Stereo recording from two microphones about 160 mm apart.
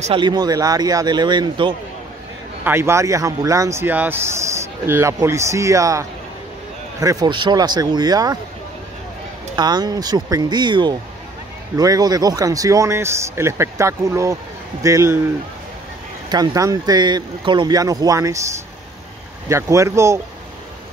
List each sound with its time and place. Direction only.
0.0 s speech: 30° right (ahead or behind)
2.6 s speech: 15° right (ahead or behind)
9.6 s speech: 25° right (ahead or behind)
16.3 s speech: 25° right (ahead or behind)
19.5 s speech: 20° right (ahead or behind)